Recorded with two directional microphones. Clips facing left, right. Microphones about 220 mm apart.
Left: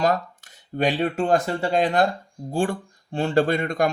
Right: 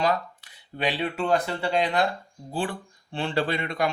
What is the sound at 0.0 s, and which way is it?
Speech, 45° left (ahead or behind).